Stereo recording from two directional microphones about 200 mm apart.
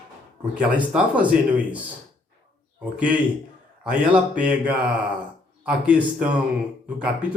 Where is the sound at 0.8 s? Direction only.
5° right (ahead or behind).